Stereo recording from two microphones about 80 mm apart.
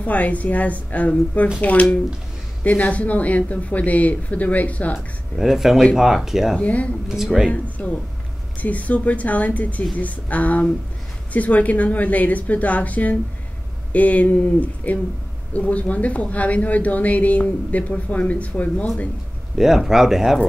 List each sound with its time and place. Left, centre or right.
0.0 s speech: centre
4.9 s speech: centre
6.6 s speech: centre
19.5 s speech: centre